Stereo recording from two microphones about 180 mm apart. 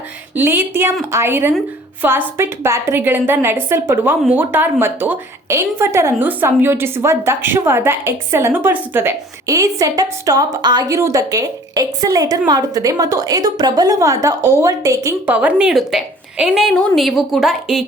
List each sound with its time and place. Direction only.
0.3 s a woman's voice: 10° right (ahead or behind)
15.4 s a woman's voice: 5° right (ahead or behind)